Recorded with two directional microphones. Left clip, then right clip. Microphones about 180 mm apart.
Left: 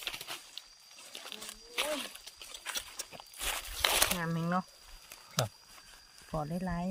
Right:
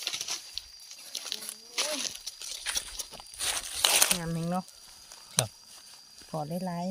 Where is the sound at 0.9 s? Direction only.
5° right (ahead or behind).